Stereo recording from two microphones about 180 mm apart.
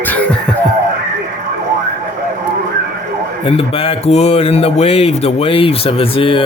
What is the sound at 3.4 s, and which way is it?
A man's voice, 30° left (ahead or behind).